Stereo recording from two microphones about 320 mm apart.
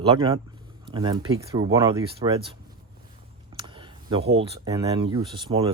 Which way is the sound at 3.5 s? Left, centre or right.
Centre.